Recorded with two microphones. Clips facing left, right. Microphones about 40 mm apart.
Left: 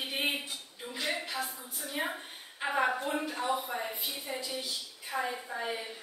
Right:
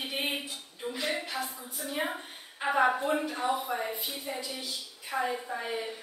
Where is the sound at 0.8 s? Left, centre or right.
Centre; by 3.7 s right.